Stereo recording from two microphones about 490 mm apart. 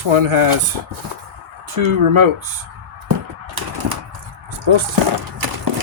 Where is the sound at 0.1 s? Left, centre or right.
Right.